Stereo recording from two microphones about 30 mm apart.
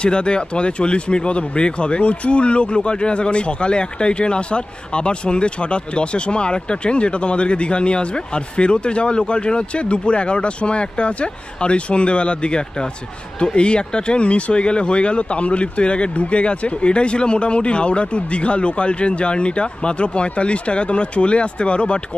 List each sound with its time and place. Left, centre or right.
0.0 s speech: left